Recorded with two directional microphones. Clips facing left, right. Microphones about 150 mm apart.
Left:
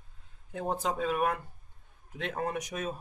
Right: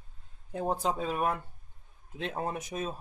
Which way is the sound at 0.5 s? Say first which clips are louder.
Right 1 dB; 35° right (ahead or behind).